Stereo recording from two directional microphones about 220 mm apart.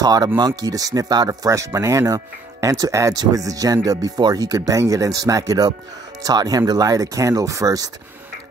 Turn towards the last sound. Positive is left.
turn(degrees=-15)  # may be behind; listen again after turning